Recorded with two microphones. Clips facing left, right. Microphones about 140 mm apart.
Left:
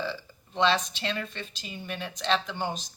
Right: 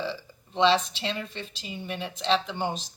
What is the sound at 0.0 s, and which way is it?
Speech, 25° right (ahead or behind).